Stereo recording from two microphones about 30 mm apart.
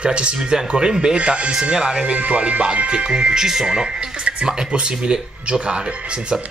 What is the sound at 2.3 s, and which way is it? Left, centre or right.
Speech, right.